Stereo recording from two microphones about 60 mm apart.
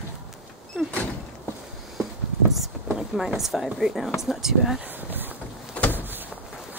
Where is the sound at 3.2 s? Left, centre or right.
Centre.